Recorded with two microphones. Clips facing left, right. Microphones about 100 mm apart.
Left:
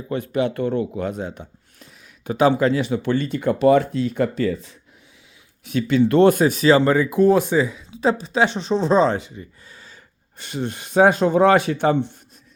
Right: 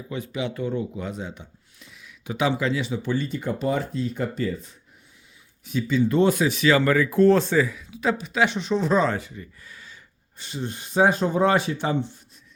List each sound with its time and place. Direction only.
0.1 s speech: 55° left (ahead or behind); by 4.7 s 85° left
5.6 s speech: 70° left (ahead or behind)
6.3 s speech: 45° left (ahead or behind)
10.3 s speech: 60° left (ahead or behind)